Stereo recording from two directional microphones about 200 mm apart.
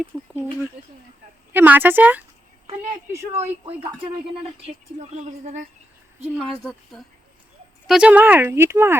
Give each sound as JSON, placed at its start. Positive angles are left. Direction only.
{"t": 0.1, "sound": "speech", "side_deg": 0}
{"t": 1.5, "sound": "speech", "side_deg": -10}
{"t": 5.1, "sound": "a woman's voice", "side_deg": -35}
{"t": 6.4, "sound": "a woman's voice", "side_deg": 5}